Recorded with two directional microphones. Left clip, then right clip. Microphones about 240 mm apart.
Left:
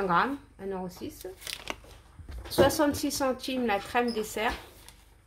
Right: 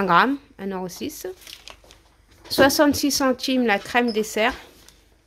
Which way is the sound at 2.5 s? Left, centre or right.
Right.